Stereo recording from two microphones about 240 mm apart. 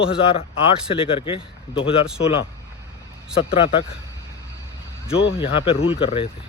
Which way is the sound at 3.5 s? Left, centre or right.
Left.